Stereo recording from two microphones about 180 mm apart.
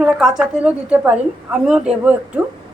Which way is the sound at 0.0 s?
5° right (ahead or behind).